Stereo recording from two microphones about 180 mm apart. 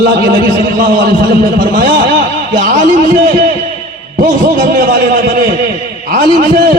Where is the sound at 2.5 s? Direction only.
50° right (ahead or behind).